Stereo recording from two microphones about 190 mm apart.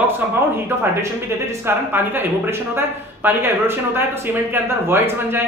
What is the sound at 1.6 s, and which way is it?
Speech, 10° right (ahead or behind).